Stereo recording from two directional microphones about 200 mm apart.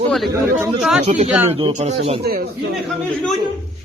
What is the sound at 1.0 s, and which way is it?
Speech, 35° right (ahead or behind).